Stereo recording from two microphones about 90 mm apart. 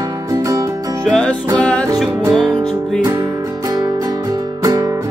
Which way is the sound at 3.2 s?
50° right (ahead or behind).